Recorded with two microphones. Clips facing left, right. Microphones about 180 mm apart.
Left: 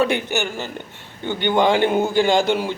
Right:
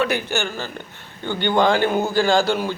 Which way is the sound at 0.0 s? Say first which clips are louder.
Left 2 dB; 25° left (ahead or behind).